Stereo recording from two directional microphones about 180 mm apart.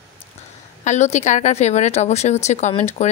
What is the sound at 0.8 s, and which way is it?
Speech, 40° left (ahead or behind).